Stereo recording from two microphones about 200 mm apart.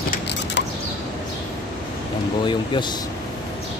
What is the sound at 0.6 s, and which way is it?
Mechanisms, 60° left (ahead or behind).